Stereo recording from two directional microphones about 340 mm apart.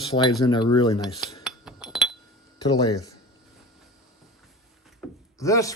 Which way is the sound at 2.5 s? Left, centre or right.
Centre.